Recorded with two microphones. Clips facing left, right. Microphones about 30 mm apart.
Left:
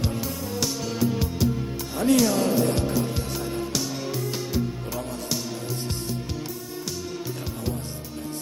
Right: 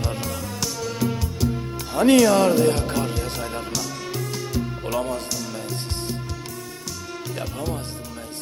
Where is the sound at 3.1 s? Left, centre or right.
Right.